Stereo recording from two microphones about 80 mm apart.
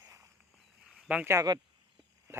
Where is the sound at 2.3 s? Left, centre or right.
Right.